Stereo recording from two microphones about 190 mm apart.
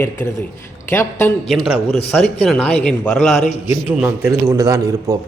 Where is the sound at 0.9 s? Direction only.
15° left (ahead or behind).